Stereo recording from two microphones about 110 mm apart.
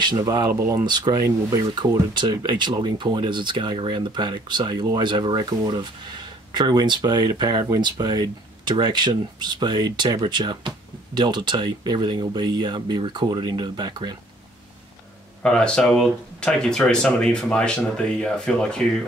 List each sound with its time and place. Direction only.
0.0 s speech: 40° right (ahead or behind)
15.4 s speech: 5° left (ahead or behind)